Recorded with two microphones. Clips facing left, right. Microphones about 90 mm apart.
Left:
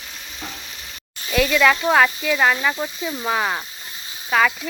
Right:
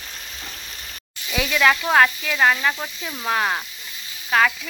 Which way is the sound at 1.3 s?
5° right (ahead or behind).